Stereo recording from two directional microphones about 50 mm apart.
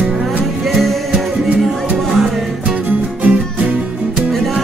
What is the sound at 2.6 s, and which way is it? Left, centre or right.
Music, right.